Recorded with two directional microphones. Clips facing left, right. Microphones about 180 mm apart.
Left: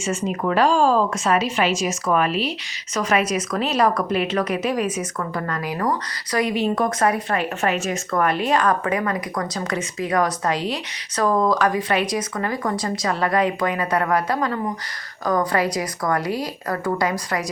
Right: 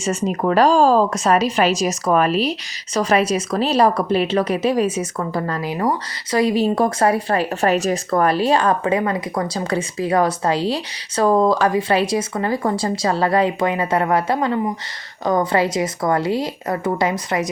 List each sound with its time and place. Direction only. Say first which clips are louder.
0.0 s speech: right 3 dB; 40° right (ahead or behind)